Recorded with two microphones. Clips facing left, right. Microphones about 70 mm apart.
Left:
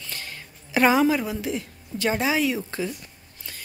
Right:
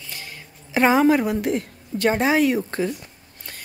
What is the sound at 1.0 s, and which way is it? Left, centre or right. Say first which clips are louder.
A woman's voice: right 5 dB; right.